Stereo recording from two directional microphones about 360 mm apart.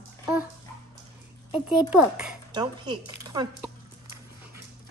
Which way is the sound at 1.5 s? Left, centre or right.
Centre.